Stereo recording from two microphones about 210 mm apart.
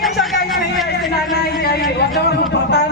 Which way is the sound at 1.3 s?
45° left (ahead or behind).